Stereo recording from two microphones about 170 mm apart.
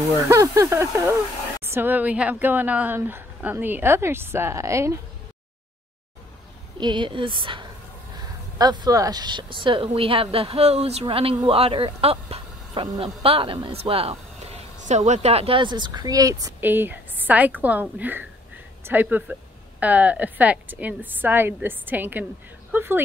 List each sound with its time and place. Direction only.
0.3 s speech: 15° right (ahead or behind)
6.8 s a man's voice: 30° right (ahead or behind); by 23.0 s 10° right (ahead or behind)